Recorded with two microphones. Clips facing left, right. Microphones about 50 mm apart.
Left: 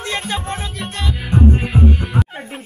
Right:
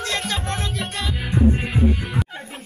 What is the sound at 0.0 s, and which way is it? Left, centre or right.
Music, left.